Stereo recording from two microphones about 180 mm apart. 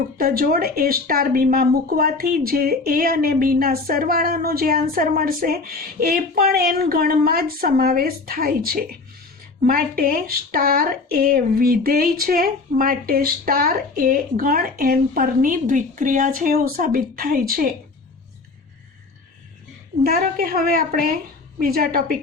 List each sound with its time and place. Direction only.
0.2 s a woman's voice: 55° right (ahead or behind)
20.1 s a woman's voice: 55° right (ahead or behind)